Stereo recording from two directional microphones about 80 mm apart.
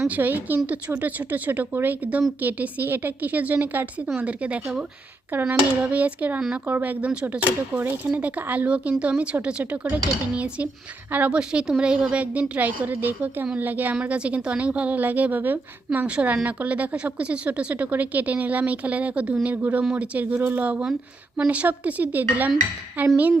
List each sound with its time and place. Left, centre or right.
0.1 s a woman's voice: right